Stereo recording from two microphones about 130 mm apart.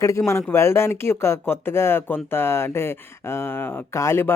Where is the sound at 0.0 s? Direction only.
25° left (ahead or behind).